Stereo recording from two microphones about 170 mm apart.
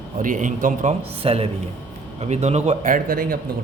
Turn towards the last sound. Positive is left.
turn(degrees=-55)  # may be behind; listen again after turning